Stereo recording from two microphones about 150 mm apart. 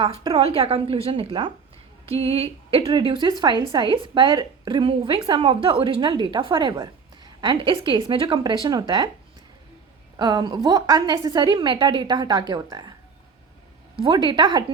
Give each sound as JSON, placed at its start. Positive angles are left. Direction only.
{"t": 0.0, "sound": "a woman's voice", "side_deg": -40}
{"t": 10.2, "sound": "a woman's voice", "side_deg": -30}
{"t": 13.9, "sound": "a woman's voice", "side_deg": -30}